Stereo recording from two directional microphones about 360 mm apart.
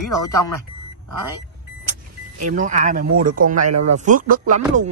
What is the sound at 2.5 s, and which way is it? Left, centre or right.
Speech, centre.